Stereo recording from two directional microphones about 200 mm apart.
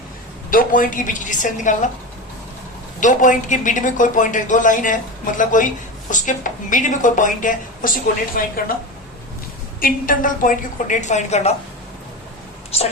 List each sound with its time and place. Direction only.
0.5 s a woman's voice: 45° left (ahead or behind)
3.0 s a woman's voice: 40° left (ahead or behind)
9.8 s a woman's voice: 45° left (ahead or behind)